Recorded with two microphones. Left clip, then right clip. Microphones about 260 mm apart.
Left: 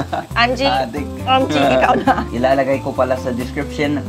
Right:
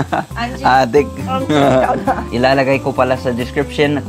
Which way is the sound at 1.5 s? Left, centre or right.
Right.